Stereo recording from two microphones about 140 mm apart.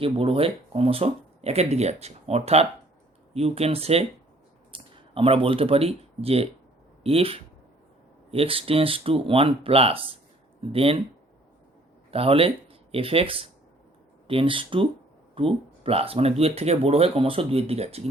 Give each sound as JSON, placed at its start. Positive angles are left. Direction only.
{"t": 0.0, "sound": "speech", "side_deg": -40}
{"t": 12.1, "sound": "speech", "side_deg": -45}